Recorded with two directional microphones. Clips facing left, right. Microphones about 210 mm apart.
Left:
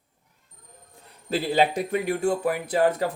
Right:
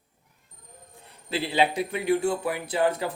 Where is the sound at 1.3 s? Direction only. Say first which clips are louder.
Left 2 dB; 45° left (ahead or behind).